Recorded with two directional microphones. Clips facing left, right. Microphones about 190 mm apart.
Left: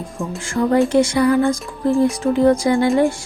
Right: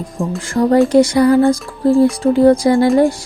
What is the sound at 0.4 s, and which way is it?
Speech, 35° right (ahead or behind).